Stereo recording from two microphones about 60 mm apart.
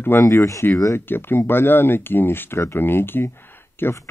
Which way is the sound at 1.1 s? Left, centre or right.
Left.